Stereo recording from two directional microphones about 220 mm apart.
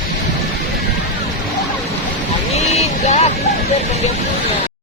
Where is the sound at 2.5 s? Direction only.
30° left (ahead or behind).